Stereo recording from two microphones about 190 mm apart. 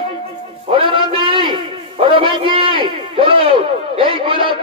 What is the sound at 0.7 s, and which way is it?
A man's voice, 25° right (ahead or behind).